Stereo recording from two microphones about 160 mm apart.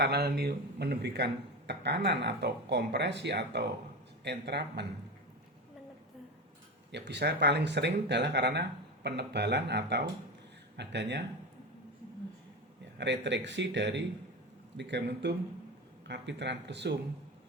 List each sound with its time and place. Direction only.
0.0 s speech: 85° right
6.9 s speech: 90° right
13.0 s speech: 90° right